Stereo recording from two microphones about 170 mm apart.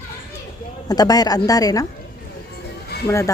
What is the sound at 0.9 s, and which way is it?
Speech, 20° left (ahead or behind).